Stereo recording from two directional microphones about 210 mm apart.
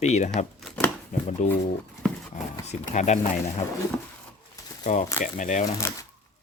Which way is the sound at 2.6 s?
35° left (ahead or behind).